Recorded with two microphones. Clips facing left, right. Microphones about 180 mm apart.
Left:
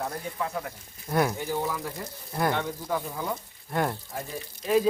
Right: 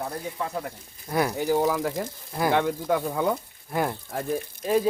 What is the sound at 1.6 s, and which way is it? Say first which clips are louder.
Speech: right 7 dB; 90° right.